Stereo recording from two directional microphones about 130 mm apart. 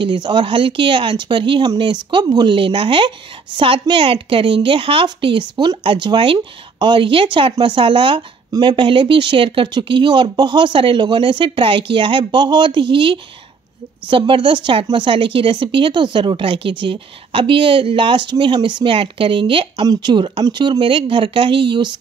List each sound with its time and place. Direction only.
0.0 s a woman's voice: 40° right (ahead or behind)